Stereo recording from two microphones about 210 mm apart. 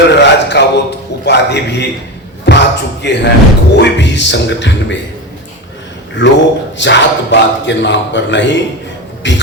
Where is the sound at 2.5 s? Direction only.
55° left (ahead or behind).